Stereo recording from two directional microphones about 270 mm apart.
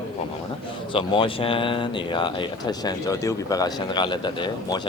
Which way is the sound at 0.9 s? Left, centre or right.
Centre.